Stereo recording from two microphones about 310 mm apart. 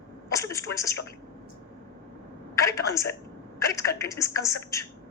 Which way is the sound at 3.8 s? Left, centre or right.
Centre.